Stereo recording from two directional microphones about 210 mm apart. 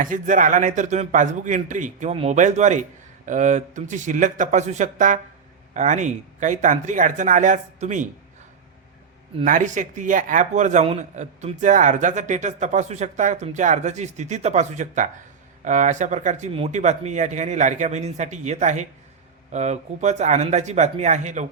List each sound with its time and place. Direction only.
0.0 s speech: 40° right (ahead or behind)
9.4 s speech: 35° right (ahead or behind)